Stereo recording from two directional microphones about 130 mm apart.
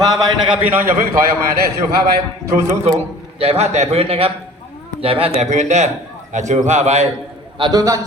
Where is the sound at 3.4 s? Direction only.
55° right (ahead or behind).